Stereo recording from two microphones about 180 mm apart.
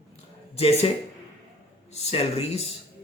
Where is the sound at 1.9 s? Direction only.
35° left (ahead or behind).